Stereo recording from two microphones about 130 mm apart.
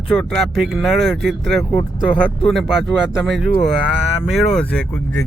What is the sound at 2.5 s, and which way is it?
Speech, centre (ahead or behind).